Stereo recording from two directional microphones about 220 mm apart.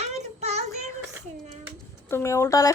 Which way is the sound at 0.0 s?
30° right (ahead or behind).